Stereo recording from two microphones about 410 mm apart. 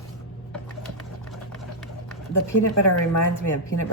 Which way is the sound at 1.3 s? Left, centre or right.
Centre.